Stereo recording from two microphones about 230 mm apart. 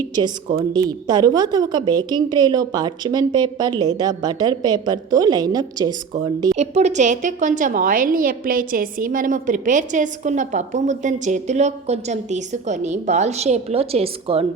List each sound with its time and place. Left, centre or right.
0.2 s a woman's voice: right
6.6 s a woman's voice: right